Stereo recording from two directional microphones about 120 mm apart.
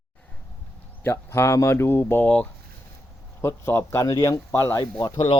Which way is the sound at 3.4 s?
20° left (ahead or behind).